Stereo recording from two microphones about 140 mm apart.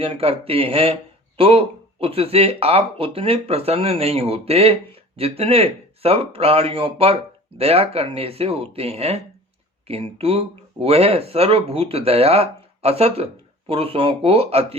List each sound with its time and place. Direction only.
0.0 s speech: 45° right (ahead or behind)